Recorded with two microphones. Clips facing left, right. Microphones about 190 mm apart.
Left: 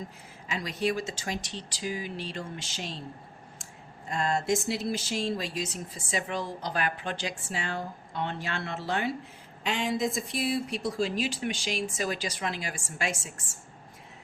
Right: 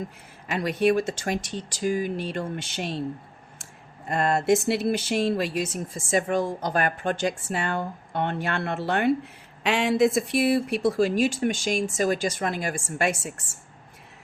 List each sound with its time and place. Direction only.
0.4 s speech: 60° right (ahead or behind)
4.1 s speech: 60° right (ahead or behind)